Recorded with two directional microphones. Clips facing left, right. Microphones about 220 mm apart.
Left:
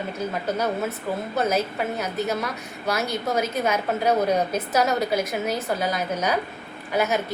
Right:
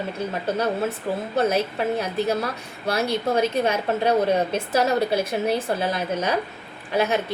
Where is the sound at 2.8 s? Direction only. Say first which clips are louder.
Right 3 dB; 30° right (ahead or behind).